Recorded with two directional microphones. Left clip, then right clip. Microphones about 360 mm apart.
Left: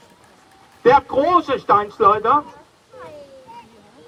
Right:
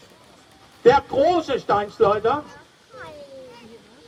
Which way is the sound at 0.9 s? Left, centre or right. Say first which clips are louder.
Left 2 dB; centre.